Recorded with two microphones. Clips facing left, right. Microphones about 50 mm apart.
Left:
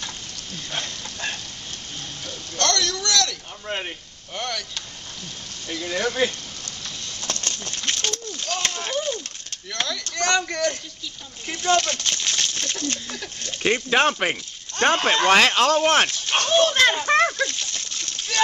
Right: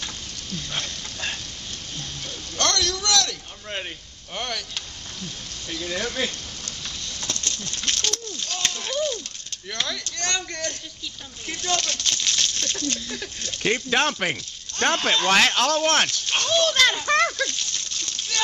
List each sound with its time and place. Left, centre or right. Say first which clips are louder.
2.5 s a sound: left 1 dB; centre
3.6 s speech: left 3 dB; centre
4.4 s speech: left 1 dB; centre
5.7 s speech: left 3 dB; centre
7.2 s a sound: left 2 dB; left
7.8 s speech: left 1 dB; left
8.5 s speech: left 3 dB; left
11.6 s speech: left 6 dB; left